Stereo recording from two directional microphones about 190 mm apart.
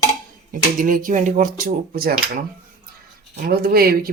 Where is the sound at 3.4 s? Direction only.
50° right (ahead or behind).